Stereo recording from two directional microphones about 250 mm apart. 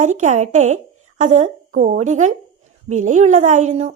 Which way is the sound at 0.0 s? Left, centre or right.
Right.